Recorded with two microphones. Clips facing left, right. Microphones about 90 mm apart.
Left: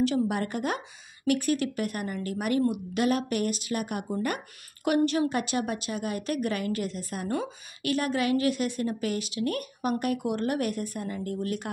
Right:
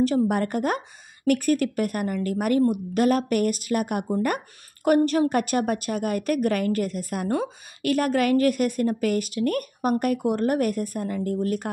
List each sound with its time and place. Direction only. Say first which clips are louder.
0.0 s a woman's voice: right 4 dB; 45° right (ahead or behind)